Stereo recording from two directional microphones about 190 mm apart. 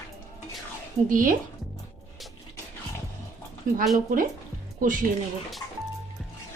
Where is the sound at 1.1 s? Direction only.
45° right (ahead or behind).